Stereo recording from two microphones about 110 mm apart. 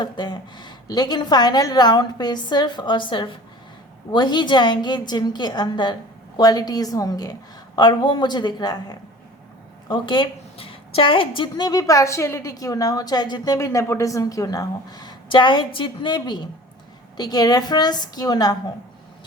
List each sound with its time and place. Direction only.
0.0 s a woman's voice: 45° left (ahead or behind)